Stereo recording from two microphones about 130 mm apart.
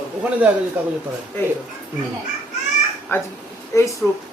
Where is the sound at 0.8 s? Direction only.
10° right (ahead or behind).